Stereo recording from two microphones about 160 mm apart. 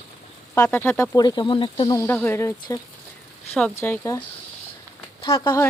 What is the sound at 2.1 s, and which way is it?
Speech, 10° left (ahead or behind).